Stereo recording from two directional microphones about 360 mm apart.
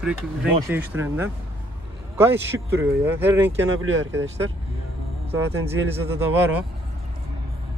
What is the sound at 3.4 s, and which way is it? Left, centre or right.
Speech, right.